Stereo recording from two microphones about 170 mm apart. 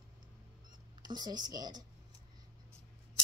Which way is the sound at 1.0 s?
25° right (ahead or behind).